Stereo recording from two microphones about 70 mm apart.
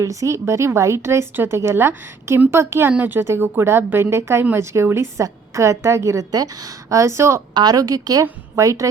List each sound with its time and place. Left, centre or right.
0.0 s a woman's voice: right
7.0 s a woman's voice: right
7.5 s a woman's voice: right